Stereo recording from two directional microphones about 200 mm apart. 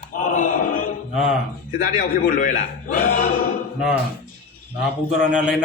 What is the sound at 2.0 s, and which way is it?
A man's voice, 45° left (ahead or behind).